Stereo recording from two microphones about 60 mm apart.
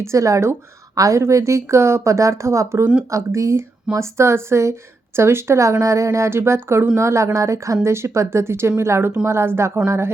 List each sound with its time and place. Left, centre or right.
0.0 s a woman's voice: right